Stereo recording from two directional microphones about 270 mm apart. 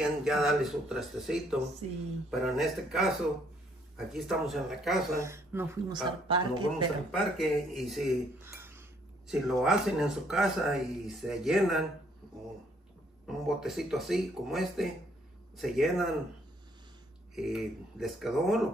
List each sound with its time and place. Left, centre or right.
0.0 s speech: centre
7.1 s speech: centre
13.3 s speech: centre
17.4 s speech: centre